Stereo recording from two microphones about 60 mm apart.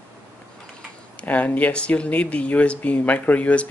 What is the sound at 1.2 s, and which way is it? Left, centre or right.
Speech, left.